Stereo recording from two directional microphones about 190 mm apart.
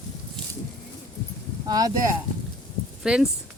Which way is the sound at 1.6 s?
20° right (ahead or behind).